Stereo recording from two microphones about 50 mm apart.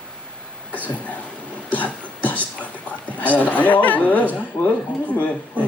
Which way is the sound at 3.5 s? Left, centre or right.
Left.